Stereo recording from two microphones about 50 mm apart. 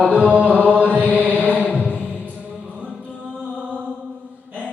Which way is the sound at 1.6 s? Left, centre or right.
Left.